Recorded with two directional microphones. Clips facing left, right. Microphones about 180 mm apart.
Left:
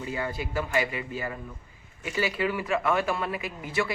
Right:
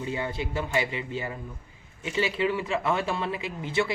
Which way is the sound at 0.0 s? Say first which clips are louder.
Right 1 dB; 25° right (ahead or behind).